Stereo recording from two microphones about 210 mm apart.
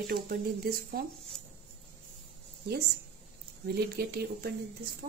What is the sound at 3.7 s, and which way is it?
Speech, 50° right (ahead or behind).